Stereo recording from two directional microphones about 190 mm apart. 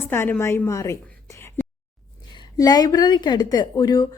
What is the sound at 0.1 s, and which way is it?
A woman's voice, 10° left (ahead or behind).